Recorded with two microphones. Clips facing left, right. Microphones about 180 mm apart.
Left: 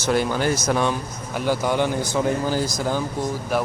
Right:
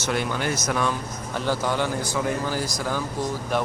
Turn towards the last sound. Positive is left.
turn(degrees=5)  # may be behind; listen again after turning